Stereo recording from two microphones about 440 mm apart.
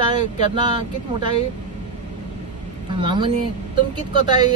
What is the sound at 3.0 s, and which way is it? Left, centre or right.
Speech, centre.